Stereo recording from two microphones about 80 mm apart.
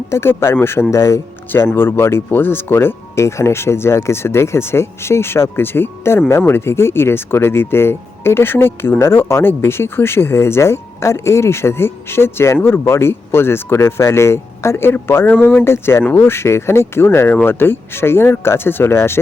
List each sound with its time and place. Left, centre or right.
0.1 s speech: left